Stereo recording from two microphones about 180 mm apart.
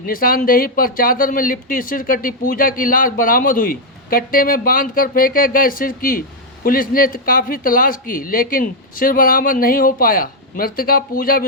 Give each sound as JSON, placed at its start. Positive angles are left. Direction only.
{"t": 0.0, "sound": "speech", "side_deg": 55}